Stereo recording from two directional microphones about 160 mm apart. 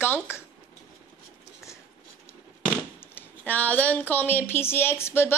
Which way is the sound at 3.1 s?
10° left (ahead or behind).